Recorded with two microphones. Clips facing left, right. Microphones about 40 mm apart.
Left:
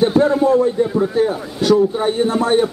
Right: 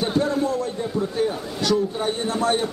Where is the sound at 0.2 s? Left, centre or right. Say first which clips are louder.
Left 9 dB; left.